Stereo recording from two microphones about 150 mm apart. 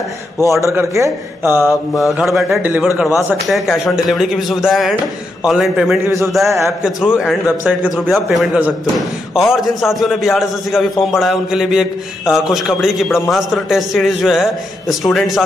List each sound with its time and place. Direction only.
0.5 s a man's voice: 20° right (ahead or behind)
2.0 s a man's voice: centre (ahead or behind)
2.6 s a man's voice: 10° right (ahead or behind)
3.4 s a man's voice: centre (ahead or behind)
6.0 s a man's voice: 20° right (ahead or behind)
6.8 s a man's voice: 5° right (ahead or behind)